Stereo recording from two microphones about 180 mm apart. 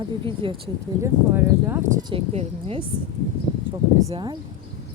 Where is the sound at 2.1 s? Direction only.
35° right (ahead or behind).